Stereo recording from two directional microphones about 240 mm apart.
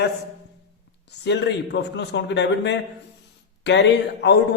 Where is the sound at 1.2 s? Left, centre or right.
Left.